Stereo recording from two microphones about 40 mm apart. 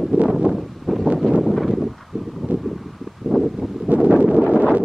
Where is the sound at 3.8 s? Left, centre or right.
Right.